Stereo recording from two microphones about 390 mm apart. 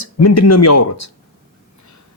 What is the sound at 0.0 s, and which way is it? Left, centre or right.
Speech, left.